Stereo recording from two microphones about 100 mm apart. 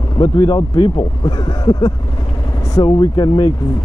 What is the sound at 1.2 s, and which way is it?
Speech, 35° left (ahead or behind).